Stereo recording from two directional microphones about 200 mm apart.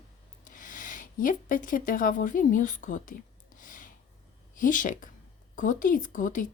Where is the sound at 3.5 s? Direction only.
40° left (ahead or behind).